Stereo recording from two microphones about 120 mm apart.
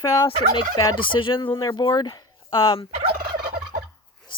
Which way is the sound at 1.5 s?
30° left (ahead or behind).